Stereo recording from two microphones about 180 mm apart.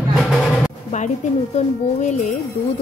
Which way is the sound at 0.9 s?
40° left (ahead or behind).